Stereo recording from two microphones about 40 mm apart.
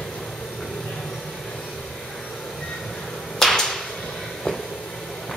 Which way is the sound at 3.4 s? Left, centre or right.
Centre.